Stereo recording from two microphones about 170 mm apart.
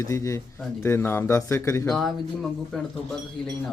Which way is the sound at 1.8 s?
Centre (ahead or behind).